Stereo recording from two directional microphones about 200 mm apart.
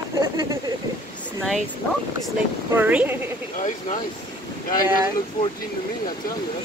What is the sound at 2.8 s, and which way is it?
Speech, 10° right (ahead or behind).